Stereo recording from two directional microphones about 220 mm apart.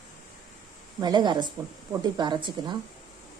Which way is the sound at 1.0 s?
20° right (ahead or behind).